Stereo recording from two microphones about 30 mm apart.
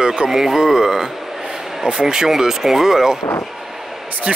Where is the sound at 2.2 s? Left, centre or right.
Centre.